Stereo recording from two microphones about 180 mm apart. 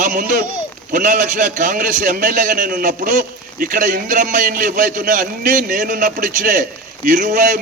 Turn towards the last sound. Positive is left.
turn(degrees=-45)  # may be behind; listen again after turning